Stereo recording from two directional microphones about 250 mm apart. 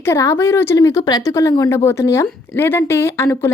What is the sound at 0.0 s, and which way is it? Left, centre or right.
Speech, centre.